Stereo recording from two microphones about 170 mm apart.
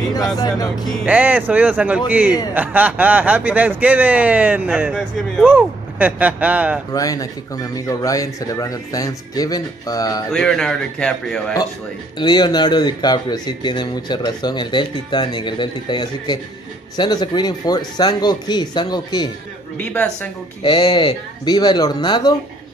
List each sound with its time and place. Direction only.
0.4 s speech: 25° left (ahead or behind)
1.0 s speech: 10° right (ahead or behind)
6.9 s speech: 20° left (ahead or behind)
10.3 s a man's voice: 5° left (ahead or behind)
12.2 s speech: 25° left (ahead or behind)
19.8 s speech: 10° left (ahead or behind)
20.6 s speech: 25° left (ahead or behind)